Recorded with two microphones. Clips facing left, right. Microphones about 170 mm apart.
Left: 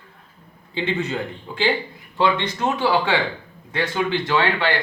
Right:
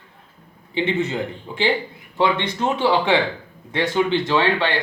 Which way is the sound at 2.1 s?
20° right (ahead or behind).